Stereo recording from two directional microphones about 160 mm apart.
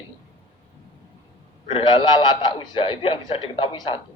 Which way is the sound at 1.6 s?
30° left (ahead or behind).